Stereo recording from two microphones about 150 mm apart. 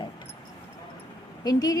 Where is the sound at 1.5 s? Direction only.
25° left (ahead or behind).